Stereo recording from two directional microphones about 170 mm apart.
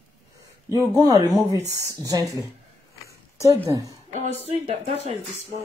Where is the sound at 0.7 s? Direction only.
20° right (ahead or behind).